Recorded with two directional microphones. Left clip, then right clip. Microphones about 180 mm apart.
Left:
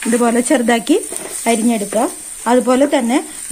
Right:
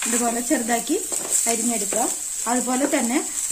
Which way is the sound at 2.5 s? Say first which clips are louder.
Left 10 dB; 50° left (ahead or behind).